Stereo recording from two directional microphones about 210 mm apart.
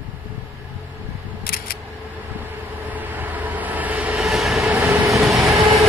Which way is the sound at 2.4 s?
10° right (ahead or behind).